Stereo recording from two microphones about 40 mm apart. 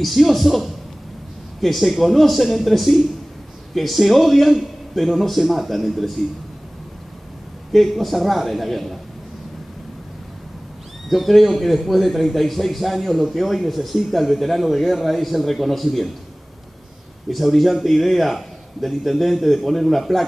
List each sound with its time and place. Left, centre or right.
0.0 s a man's voice: centre
7.7 s a man's voice: centre
11.1 s a man's voice: centre
17.3 s a man's voice: centre